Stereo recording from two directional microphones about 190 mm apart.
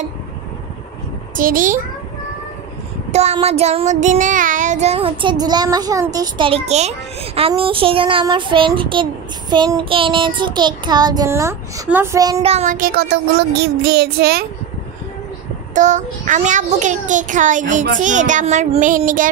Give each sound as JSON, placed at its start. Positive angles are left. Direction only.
{"t": 1.3, "sound": "child singing", "side_deg": -45}
{"t": 3.1, "sound": "child singing", "side_deg": -35}
{"t": 12.4, "sound": "child singing", "side_deg": -35}
{"t": 15.7, "sound": "child singing", "side_deg": -40}